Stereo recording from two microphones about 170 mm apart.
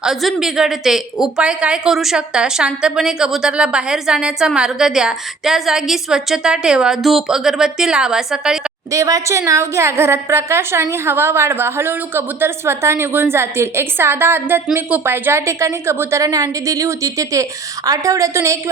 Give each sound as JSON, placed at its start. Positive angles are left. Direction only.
{"t": 0.0, "sound": "a woman's voice", "side_deg": 0}
{"t": 8.9, "sound": "a woman's voice", "side_deg": -20}